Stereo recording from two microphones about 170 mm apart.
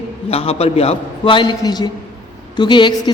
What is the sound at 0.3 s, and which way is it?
A woman's voice, 35° left (ahead or behind).